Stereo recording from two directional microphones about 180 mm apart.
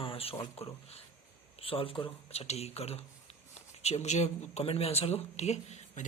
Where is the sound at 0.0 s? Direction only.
30° left (ahead or behind).